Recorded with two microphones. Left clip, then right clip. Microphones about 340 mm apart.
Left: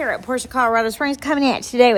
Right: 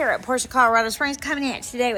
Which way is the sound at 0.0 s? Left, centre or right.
Centre.